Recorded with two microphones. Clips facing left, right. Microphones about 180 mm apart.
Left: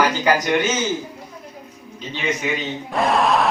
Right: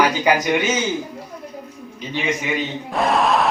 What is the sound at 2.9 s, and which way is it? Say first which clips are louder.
Speech: even; centre (ahead or behind).